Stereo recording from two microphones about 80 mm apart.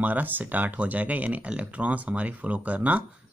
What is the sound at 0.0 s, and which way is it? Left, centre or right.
Speech, right.